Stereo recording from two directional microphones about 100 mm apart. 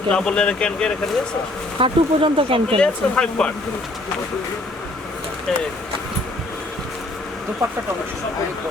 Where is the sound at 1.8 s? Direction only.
65° right (ahead or behind).